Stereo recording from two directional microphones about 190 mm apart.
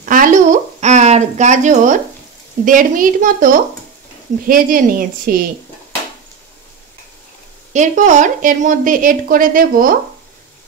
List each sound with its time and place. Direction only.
0.1 s a woman's voice: 45° right (ahead or behind)
7.7 s speech: 40° right (ahead or behind)